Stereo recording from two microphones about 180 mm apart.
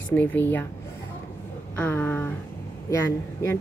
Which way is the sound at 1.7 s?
10° left (ahead or behind).